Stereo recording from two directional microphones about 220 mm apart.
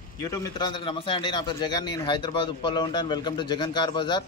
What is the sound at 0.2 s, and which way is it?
Speech, 15° left (ahead or behind).